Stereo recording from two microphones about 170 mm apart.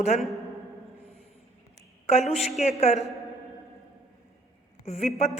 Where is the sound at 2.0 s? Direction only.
40° left (ahead or behind).